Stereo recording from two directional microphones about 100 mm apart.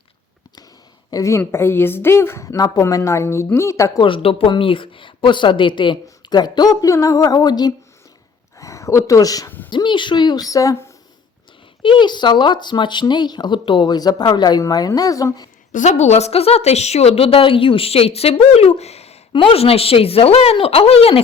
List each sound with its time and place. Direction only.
1.1 s a woman's voice: 30° left (ahead or behind)
4.0 s speech: 65° left (ahead or behind); by 7.7 s 45° left (ahead or behind)
8.5 s speech: 30° left (ahead or behind)
9.6 s speech: 50° left (ahead or behind); by 10.8 s 35° left (ahead or behind)
11.8 s speech: 55° left (ahead or behind); by 15.4 s 35° left (ahead or behind)
16.1 s a woman's voice: 85° left